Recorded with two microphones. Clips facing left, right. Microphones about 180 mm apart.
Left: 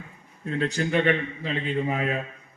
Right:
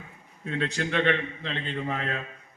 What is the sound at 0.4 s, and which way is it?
A man's voice, 5° left (ahead or behind).